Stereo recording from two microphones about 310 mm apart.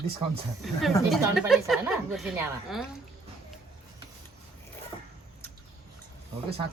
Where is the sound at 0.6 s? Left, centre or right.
Centre.